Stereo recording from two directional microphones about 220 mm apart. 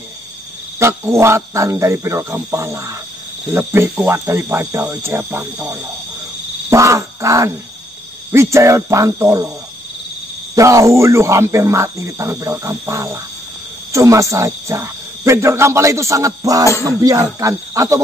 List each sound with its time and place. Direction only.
0.7 s speech: 10° right (ahead or behind)
10.5 s speech: 15° right (ahead or behind)